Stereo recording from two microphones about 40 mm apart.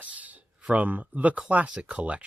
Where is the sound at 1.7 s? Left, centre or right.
Right.